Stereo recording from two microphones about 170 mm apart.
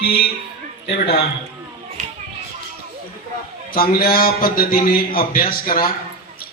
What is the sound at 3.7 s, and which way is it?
A man's voice, 60° left (ahead or behind).